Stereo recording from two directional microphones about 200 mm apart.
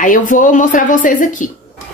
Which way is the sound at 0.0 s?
40° left (ahead or behind).